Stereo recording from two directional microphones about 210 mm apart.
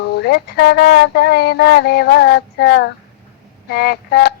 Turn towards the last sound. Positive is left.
turn(degrees=50)  # may be behind; listen again after turning